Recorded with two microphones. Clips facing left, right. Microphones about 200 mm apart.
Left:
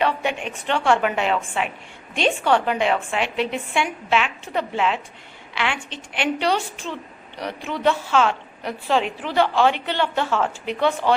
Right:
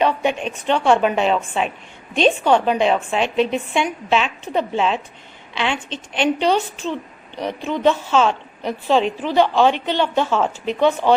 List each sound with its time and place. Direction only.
0.0 s a woman's voice: 20° right (ahead or behind)